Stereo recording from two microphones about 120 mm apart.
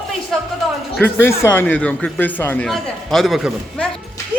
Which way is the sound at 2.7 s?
5° left (ahead or behind).